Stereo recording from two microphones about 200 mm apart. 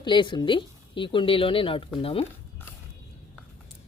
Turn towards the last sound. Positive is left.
turn(degrees=30)  # may be behind; listen again after turning